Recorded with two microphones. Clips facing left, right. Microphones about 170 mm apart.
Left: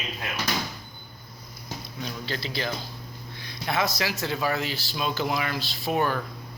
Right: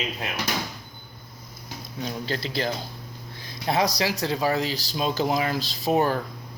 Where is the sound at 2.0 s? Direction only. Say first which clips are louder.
Right 4 dB; 40° right (ahead or behind).